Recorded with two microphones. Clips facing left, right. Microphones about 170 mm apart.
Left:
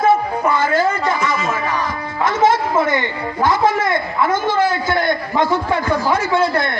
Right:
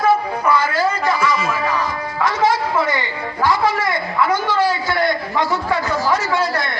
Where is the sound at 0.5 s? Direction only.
50° left (ahead or behind).